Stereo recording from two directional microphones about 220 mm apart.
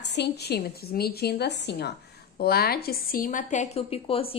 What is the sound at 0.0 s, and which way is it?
A woman's voice, 50° left (ahead or behind).